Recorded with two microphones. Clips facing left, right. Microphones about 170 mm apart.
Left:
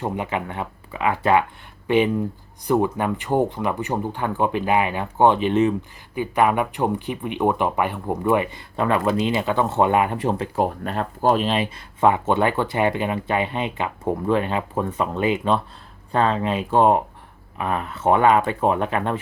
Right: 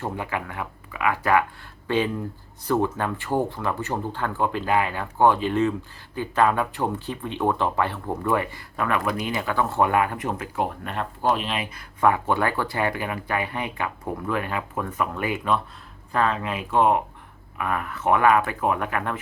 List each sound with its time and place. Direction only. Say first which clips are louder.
0.0 s speech: left 4 dB; 20° left (ahead or behind)
2.6 s speech: left 3 dB; 15° left (ahead or behind)